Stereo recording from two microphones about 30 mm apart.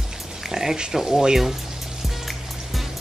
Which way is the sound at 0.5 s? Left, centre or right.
Centre.